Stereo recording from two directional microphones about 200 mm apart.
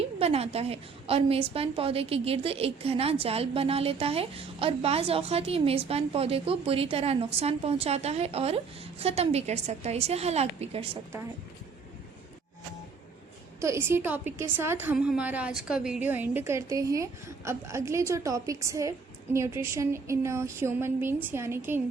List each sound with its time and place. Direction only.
0.2 s a woman's voice: 30° right (ahead or behind)
13.6 s a woman's voice: 15° right (ahead or behind)